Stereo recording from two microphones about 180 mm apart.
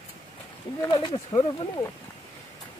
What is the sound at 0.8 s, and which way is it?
Speech, 20° left (ahead or behind).